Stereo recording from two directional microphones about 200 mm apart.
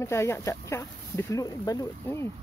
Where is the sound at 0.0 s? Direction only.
15° left (ahead or behind).